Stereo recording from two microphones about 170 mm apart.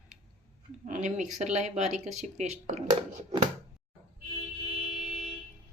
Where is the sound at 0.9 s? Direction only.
45° right (ahead or behind).